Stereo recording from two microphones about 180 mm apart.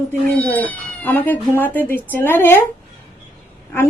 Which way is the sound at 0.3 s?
10° left (ahead or behind).